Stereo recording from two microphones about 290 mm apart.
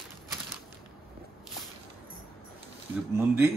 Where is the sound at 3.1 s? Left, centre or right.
Centre.